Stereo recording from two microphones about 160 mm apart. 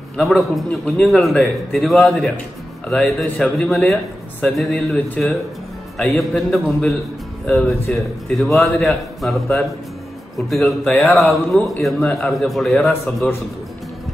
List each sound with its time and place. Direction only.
0.2 s speech: centre (ahead or behind)
10.5 s speech: centre (ahead or behind)